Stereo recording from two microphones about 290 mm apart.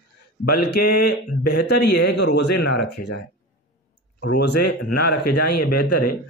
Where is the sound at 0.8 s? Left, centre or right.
Left.